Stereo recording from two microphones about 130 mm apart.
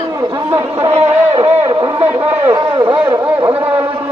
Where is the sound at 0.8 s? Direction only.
55° right (ahead or behind).